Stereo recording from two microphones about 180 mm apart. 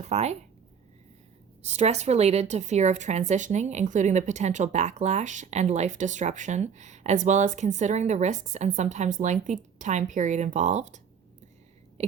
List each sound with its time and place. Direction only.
0.0 s a woman's voice: 35° right (ahead or behind)
1.6 s a woman's voice: 35° right (ahead or behind)